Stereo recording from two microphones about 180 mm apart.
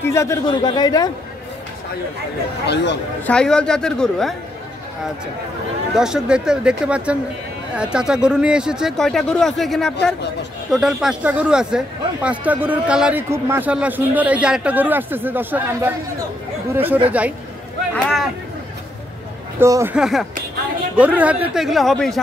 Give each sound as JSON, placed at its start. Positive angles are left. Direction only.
{"t": 0.0, "sound": "a man's voice", "side_deg": 15}
{"t": 2.6, "sound": "a man's voice", "side_deg": 70}
{"t": 3.3, "sound": "speech", "side_deg": 5}
{"t": 5.9, "sound": "a man's voice", "side_deg": -5}
{"t": 19.6, "sound": "a man's voice", "side_deg": -15}
{"t": 20.0, "sound": "speech", "side_deg": 0}